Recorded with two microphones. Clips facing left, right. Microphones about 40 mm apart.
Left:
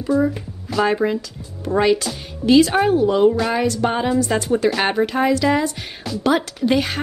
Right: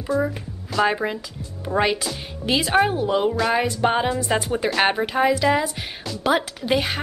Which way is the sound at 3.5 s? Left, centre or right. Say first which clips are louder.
Left 1 dB; centre.